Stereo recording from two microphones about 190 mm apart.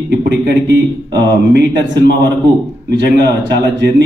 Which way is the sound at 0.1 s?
60° right (ahead or behind).